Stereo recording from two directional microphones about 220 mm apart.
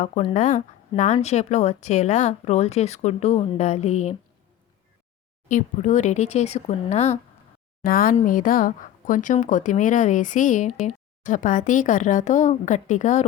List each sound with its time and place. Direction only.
0.0 s speech: 25° left (ahead or behind)
5.5 s speech: 35° left (ahead or behind)